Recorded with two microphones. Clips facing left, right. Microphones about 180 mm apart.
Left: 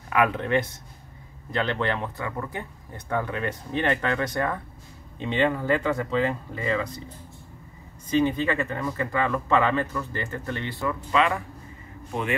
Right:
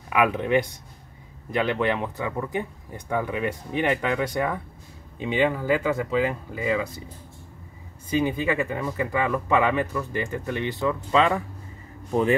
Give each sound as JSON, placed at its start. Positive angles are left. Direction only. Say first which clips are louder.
{"t": 0.1, "sound": "speech", "louder": "right 1 dB", "side_deg": -15}
{"t": 8.1, "sound": "speech", "louder": "left 1 dB", "side_deg": -10}